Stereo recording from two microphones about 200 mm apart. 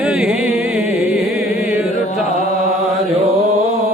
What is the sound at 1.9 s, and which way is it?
Chant, 30° left (ahead or behind).